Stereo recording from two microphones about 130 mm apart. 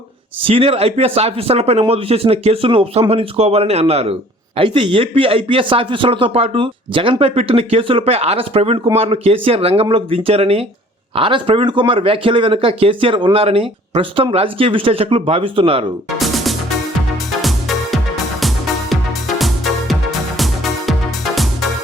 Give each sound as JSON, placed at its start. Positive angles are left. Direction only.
{"t": 0.4, "sound": "a man's voice", "side_deg": -45}
{"t": 16.1, "sound": "music", "side_deg": 0}